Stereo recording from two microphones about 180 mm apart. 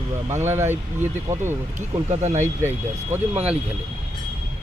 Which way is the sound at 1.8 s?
40° right (ahead or behind).